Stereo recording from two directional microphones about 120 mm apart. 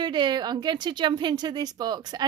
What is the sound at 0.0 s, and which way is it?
Speech, 40° right (ahead or behind).